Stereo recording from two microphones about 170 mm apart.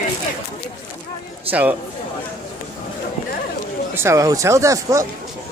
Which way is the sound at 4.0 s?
15° right (ahead or behind).